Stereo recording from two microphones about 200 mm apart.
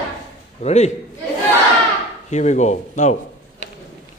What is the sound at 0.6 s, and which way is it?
Speech, 35° left (ahead or behind).